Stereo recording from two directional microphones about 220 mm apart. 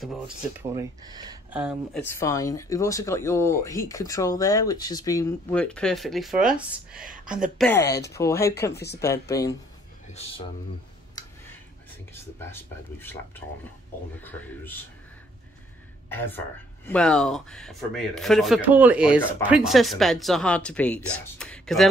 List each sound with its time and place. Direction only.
0.0 s speech: centre (ahead or behind); by 1.4 s 20° right (ahead or behind)
1.5 s speech: 5° right (ahead or behind)
2.0 s speech: 10° left (ahead or behind)
7.5 s speech: 10° left (ahead or behind)
10.0 s speech: 25° left (ahead or behind)
12.1 s speech: 10° left (ahead or behind)
14.2 s speech: 10° left (ahead or behind)
16.1 s speech: 10° left (ahead or behind)